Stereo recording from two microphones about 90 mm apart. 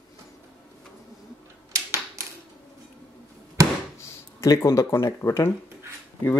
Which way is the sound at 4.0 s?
30° left (ahead or behind).